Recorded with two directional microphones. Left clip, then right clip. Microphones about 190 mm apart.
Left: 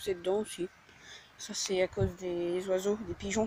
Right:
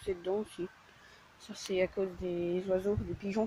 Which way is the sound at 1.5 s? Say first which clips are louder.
Left 2 dB; 5° left (ahead or behind).